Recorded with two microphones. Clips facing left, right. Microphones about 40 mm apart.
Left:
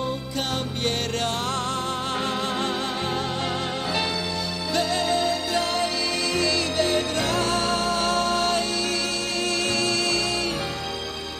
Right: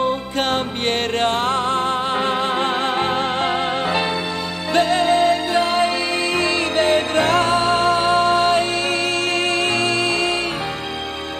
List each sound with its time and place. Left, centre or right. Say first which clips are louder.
0.0 s music: right 8 dB; right